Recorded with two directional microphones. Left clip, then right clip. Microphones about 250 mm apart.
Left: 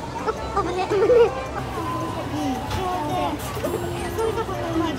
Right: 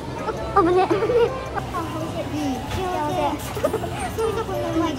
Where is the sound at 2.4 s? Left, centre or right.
Centre.